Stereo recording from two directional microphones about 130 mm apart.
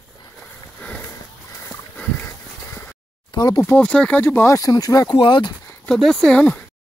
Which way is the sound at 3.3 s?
30° left (ahead or behind).